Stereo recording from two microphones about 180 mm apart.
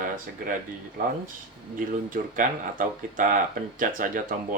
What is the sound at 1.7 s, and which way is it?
A man's voice, 50° right (ahead or behind).